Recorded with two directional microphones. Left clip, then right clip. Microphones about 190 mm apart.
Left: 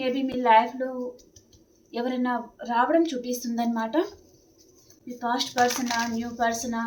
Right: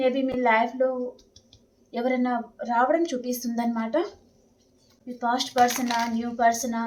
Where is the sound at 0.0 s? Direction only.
35° right (ahead or behind).